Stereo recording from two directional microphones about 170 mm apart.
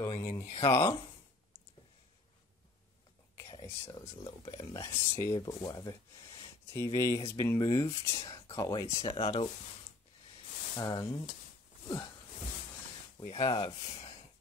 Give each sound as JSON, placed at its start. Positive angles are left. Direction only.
{"t": 0.0, "sound": "a sound", "side_deg": 25}
{"t": 0.6, "sound": "speech", "side_deg": 20}
{"t": 3.3, "sound": "speech", "side_deg": 20}
{"t": 10.8, "sound": "speech", "side_deg": 25}
{"t": 13.3, "sound": "speech", "side_deg": 30}